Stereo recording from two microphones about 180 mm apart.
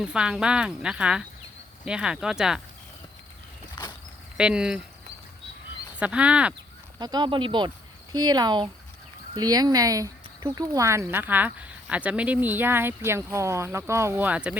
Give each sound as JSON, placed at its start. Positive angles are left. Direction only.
{"t": 0.0, "sound": "speech", "side_deg": -5}
{"t": 4.4, "sound": "speech", "side_deg": -5}
{"t": 6.0, "sound": "speech", "side_deg": -5}
{"t": 7.0, "sound": "speech", "side_deg": -25}